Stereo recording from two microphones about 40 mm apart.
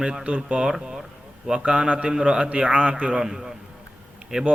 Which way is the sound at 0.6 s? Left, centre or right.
Centre.